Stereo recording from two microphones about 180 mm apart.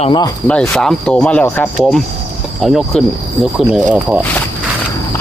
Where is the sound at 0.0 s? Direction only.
25° left (ahead or behind).